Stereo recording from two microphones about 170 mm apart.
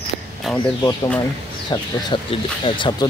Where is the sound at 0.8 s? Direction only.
25° left (ahead or behind).